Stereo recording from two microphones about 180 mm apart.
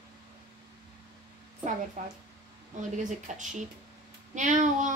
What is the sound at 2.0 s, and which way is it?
Speech, 45° right (ahead or behind).